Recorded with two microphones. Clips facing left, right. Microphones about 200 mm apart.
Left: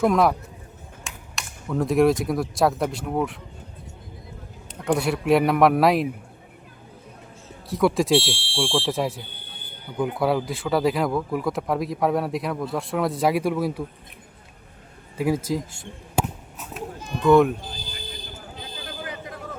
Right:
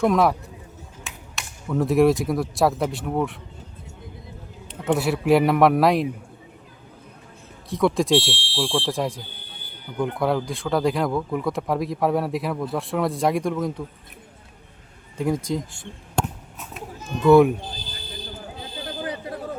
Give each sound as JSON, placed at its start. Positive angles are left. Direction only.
{"t": 0.0, "sound": "speech", "side_deg": 0}
{"t": 4.9, "sound": "speech", "side_deg": 0}
{"t": 7.7, "sound": "speech", "side_deg": 0}
{"t": 15.2, "sound": "chop", "side_deg": 5}
{"t": 18.9, "sound": "a sound", "side_deg": -30}